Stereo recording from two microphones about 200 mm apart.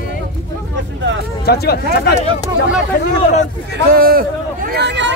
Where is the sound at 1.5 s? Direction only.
55° left (ahead or behind).